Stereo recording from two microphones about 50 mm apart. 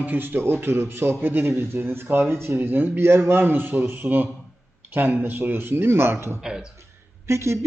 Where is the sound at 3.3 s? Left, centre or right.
Right.